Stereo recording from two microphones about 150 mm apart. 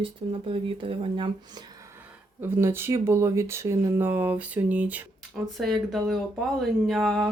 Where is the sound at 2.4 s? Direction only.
15° right (ahead or behind).